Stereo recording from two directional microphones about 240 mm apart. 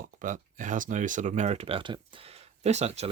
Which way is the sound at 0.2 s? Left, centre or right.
Right.